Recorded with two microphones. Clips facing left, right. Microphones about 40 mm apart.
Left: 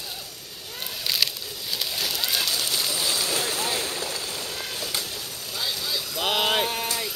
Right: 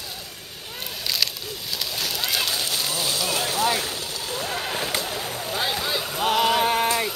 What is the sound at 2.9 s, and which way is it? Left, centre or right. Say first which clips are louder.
Boat: right 1 dB; right.